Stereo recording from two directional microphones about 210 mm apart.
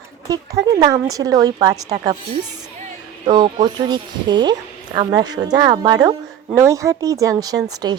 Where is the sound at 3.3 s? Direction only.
20° right (ahead or behind).